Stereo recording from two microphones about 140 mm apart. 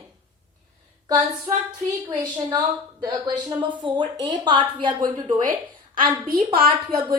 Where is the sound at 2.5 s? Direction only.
25° right (ahead or behind).